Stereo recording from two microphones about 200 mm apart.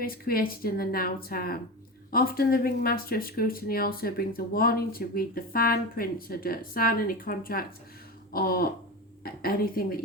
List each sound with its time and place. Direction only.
0.0 s speech: 45° left (ahead or behind)
8.3 s a sound: 50° left (ahead or behind)
9.2 s speech: 45° left (ahead or behind)